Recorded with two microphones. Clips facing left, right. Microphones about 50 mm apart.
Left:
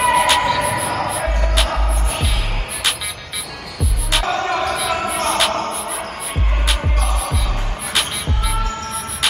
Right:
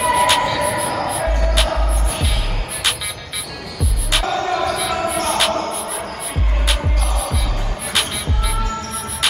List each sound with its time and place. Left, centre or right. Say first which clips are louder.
0.0 s a sound: left 1 dB; centre
1.2 s music: right 1 dB; centre
4.1 s music: left 1 dB; centre
4.5 s basketball bounce: even; left
5.0 s music: right 1 dB; centre
6.7 s music: even; centre